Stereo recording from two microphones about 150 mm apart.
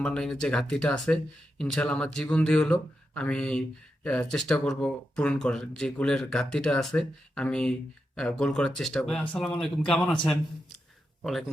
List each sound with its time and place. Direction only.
0.0 s speech: 5° left (ahead or behind)
11.2 s speech: centre (ahead or behind)